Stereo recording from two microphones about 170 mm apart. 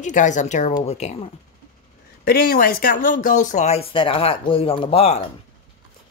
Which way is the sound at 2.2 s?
60° left (ahead or behind).